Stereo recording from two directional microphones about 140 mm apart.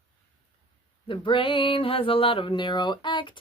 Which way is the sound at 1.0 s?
35° left (ahead or behind).